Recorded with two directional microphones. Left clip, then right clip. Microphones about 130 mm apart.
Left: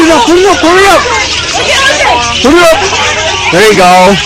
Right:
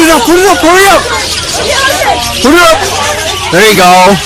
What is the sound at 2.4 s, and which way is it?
Speech, 20° right (ahead or behind).